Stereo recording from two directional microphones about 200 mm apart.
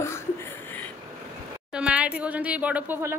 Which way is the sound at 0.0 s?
10° left (ahead or behind).